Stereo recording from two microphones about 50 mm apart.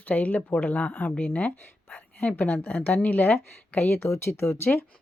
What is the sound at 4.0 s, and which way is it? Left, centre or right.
Speech, left.